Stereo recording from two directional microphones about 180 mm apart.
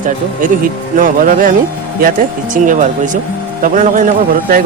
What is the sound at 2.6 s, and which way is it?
A man's voice, 45° right (ahead or behind).